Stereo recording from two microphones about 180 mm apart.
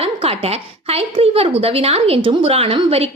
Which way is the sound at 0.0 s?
30° right (ahead or behind).